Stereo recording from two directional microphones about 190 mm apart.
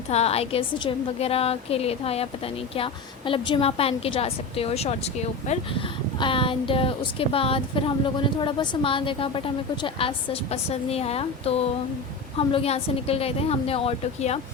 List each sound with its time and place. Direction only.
0.1 s a woman's voice: 35° left (ahead or behind)
6.1 s a woman's voice: 25° left (ahead or behind)